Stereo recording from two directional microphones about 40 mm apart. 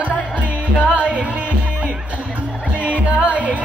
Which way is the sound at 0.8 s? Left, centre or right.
Right.